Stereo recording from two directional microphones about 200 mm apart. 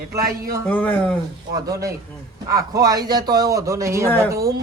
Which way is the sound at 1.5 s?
15° right (ahead or behind).